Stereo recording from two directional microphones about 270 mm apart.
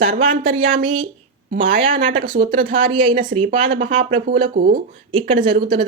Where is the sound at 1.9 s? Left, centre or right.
Right.